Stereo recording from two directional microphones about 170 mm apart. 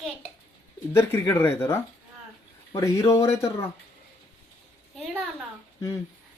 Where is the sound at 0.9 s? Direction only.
15° left (ahead or behind).